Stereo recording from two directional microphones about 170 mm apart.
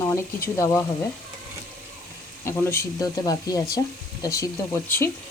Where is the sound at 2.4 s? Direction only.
15° left (ahead or behind).